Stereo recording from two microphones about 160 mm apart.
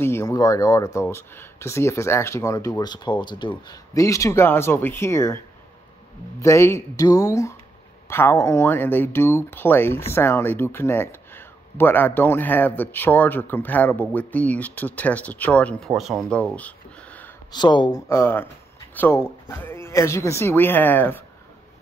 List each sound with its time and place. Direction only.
0.0 s speech: 15° left (ahead or behind)
6.4 s speech: 20° left (ahead or behind)
17.5 s speech: 25° left (ahead or behind)
18.0 s speech: 15° left (ahead or behind)